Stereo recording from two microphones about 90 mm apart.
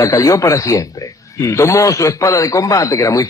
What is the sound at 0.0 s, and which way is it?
A man's voice, 40° left (ahead or behind).